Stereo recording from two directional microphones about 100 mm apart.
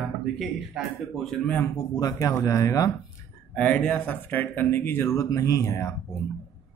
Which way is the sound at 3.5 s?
15° left (ahead or behind).